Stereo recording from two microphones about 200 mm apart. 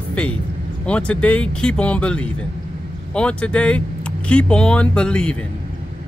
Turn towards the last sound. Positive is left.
turn(degrees=5)  # may be behind; listen again after turning